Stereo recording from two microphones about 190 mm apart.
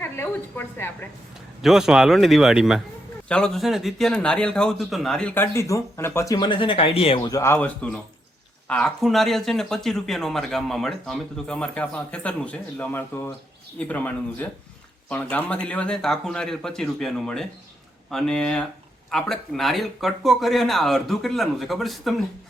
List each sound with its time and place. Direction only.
0.0 s a sound: 10° left (ahead or behind)
1.6 s speech: centre (ahead or behind); by 7.3 s 30° left (ahead or behind)
7.3 s speech: 15° left (ahead or behind); by 22.1 s centre (ahead or behind)